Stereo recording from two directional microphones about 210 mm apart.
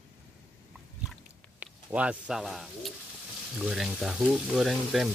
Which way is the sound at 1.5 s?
5° right (ahead or behind).